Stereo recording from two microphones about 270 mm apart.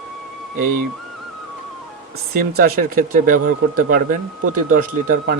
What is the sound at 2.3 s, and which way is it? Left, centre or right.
Speech, right.